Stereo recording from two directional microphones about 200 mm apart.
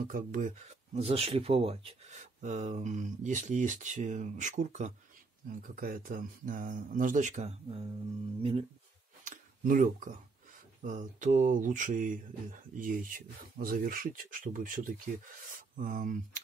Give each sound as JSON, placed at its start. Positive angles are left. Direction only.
{"t": 0.0, "sound": "speech", "side_deg": -45}
{"t": 9.2, "sound": "a sound", "side_deg": -40}
{"t": 10.8, "sound": "speech", "side_deg": -40}